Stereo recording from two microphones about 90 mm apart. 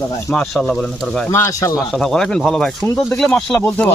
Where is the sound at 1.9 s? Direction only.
5° left (ahead or behind).